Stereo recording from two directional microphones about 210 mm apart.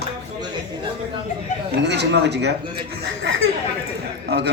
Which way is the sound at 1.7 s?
55° right (ahead or behind).